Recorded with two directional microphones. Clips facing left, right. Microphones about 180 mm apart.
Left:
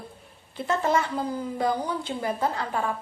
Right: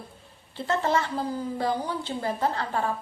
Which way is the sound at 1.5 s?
15° left (ahead or behind).